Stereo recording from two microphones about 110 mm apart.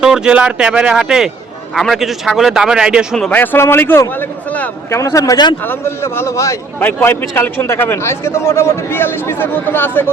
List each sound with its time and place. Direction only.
0.0 s a man's voice: 5° right (ahead or behind)
3.2 s a man's voice: 15° left (ahead or behind)
4.9 s a man's voice: 25° left (ahead or behind)
5.6 s a man's voice: 20° left (ahead or behind)